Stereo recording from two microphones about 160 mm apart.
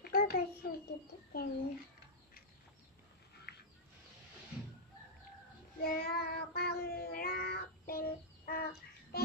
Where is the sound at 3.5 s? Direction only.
90° left.